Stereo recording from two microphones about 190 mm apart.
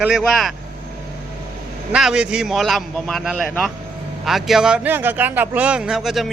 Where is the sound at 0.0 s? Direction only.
Centre (ahead or behind).